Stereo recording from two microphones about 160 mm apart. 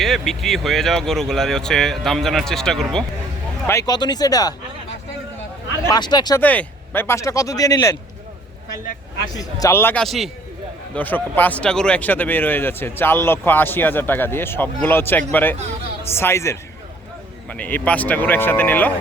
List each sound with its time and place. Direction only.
0.0 s speech: centre (ahead or behind)
3.7 s speech: 20° left (ahead or behind)
5.9 s speech: 25° left (ahead or behind)
6.4 s speech: 10° left (ahead or behind)
9.4 s speech: 20° left (ahead or behind)
10.0 s speech: centre (ahead or behind)
10.9 s speech: 10° left (ahead or behind)